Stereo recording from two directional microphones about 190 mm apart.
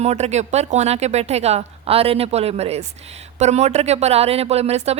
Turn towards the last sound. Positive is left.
turn(degrees=-35)  # may be behind; listen again after turning